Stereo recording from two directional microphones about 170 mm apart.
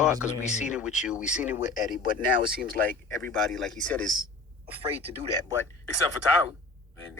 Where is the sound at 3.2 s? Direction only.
Centre (ahead or behind).